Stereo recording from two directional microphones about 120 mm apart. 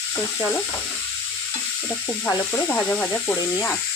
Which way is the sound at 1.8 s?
15° left (ahead or behind).